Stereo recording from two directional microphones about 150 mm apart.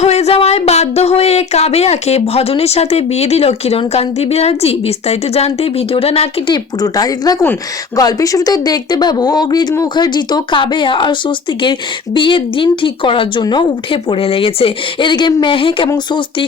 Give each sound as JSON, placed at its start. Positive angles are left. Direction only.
{"t": 0.0, "sound": "speech", "side_deg": 45}
{"t": 6.8, "sound": "speech", "side_deg": 25}